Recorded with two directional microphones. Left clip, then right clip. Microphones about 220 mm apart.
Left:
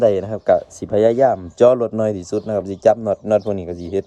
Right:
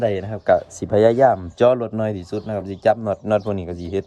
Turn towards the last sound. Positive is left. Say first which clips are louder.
# left 3 dB
turn(degrees=0)  # may be behind; listen again after turning